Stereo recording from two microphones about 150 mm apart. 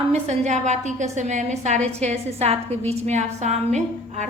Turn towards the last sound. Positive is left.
turn(degrees=-50)  # may be behind; listen again after turning